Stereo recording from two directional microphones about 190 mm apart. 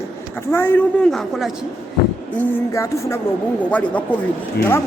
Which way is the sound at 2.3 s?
15° left (ahead or behind).